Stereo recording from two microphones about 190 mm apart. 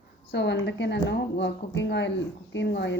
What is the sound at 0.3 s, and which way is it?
A woman's voice, 65° left (ahead or behind).